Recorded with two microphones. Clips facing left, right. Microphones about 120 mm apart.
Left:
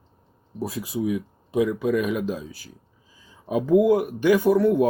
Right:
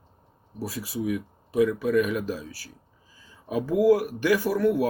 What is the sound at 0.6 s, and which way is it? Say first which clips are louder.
Speech: left 3 dB; 25° left (ahead or behind).